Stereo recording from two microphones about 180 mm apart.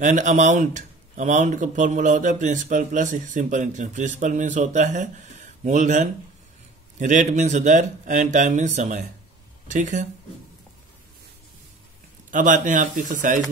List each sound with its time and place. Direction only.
0.0 s speech: 45° right (ahead or behind)
12.3 s speech: 45° right (ahead or behind)